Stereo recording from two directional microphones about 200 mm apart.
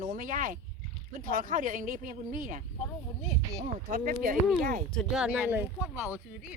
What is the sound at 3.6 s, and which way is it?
Speech, 40° right (ahead or behind).